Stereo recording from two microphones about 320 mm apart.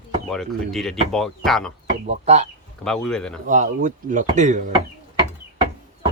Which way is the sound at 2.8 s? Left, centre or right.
Centre.